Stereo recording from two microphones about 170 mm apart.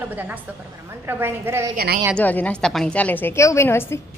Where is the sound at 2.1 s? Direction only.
10° left (ahead or behind).